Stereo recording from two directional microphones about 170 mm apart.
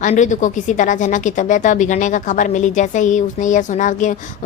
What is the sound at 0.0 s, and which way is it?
A woman's voice, 45° left (ahead or behind).